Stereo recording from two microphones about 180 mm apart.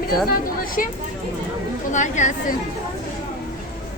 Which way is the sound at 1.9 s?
45° left (ahead or behind).